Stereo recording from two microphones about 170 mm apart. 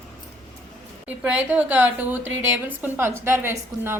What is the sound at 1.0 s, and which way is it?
A woman's voice, 10° right (ahead or behind).